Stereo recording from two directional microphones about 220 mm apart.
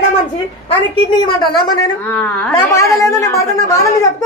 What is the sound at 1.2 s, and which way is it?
A man's voice, 20° left (ahead or behind).